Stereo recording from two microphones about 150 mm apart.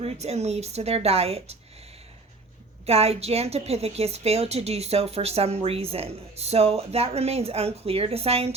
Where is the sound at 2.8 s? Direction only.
45° right (ahead or behind).